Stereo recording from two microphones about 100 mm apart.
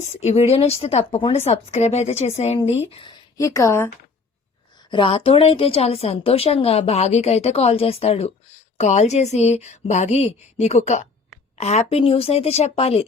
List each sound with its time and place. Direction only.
0.2 s a woman's voice: 90° left
3.3 s speech: 30° left (ahead or behind)
4.9 s a woman's voice: 60° left (ahead or behind); by 10.2 s 90° left
11.5 s a woman's voice: 90° left